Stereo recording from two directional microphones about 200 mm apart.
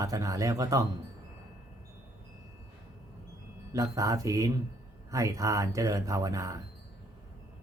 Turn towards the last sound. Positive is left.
turn(degrees=-15)  # may be behind; listen again after turning